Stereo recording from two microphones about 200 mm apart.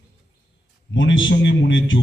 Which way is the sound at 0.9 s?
70° left (ahead or behind).